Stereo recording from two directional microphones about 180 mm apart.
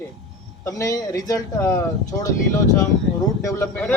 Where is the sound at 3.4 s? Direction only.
10° left (ahead or behind).